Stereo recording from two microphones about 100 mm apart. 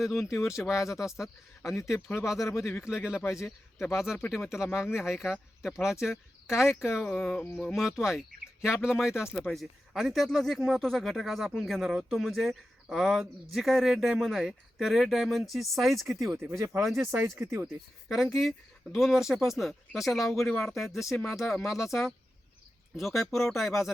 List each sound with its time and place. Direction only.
0.3 s speech: 5° right (ahead or behind)
2.4 s speech: 25° left (ahead or behind)
2.8 s speech: 10° right (ahead or behind)
7.3 s a sound: 20° left (ahead or behind)
7.6 s speech: 5° right (ahead or behind)
16.4 s speech: 25° right (ahead or behind)
17.7 s speech: 5° right (ahead or behind)